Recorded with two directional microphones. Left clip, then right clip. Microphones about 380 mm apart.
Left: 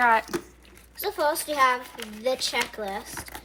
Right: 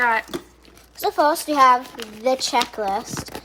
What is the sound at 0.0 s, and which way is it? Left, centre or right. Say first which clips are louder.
Speech: right 1 dB; centre.